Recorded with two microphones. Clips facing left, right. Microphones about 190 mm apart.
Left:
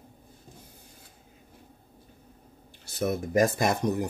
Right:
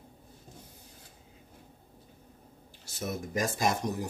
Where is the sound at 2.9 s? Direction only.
60° left (ahead or behind).